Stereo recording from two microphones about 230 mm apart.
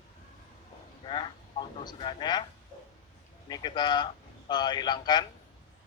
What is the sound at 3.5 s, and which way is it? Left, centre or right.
Speech, centre.